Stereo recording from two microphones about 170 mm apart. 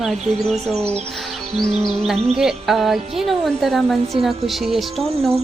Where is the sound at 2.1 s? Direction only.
40° right (ahead or behind).